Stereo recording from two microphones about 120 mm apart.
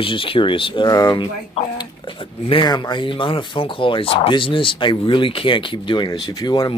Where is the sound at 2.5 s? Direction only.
40° left (ahead or behind).